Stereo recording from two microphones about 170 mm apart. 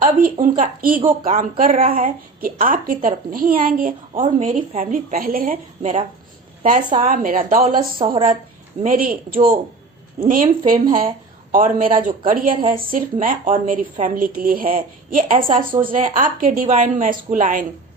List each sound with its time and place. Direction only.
0.2 s a woman's voice: 50° right (ahead or behind)
1.0 s a woman's voice: 35° right (ahead or behind)
1.4 s a woman's voice: 50° right (ahead or behind)
5.8 s a woman's voice: 40° right (ahead or behind)
7.6 s a woman's voice: 35° right (ahead or behind)
8.8 s a woman's voice: 55° right (ahead or behind)